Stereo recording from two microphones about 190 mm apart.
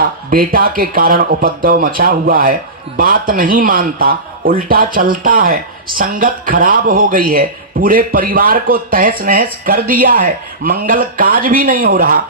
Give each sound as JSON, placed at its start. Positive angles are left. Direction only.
{"t": 0.0, "sound": "speech", "side_deg": -50}